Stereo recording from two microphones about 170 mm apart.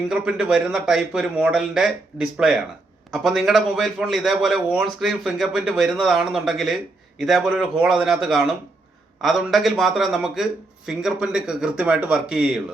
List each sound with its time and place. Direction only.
0.1 s a man's voice: 5° right (ahead or behind)